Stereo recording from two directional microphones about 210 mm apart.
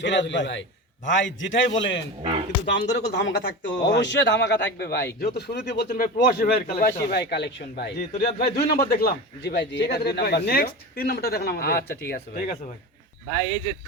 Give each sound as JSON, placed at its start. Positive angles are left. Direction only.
{"t": 0.0, "sound": "speech", "side_deg": 60}